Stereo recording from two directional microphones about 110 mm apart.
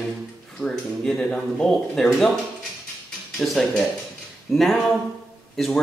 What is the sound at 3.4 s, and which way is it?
A man's voice, 5° left (ahead or behind).